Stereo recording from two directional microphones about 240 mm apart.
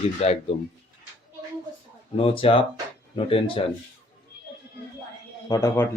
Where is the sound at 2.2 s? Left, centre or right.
Left.